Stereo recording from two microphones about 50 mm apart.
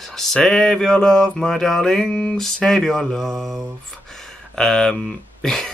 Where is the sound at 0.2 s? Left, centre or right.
Centre.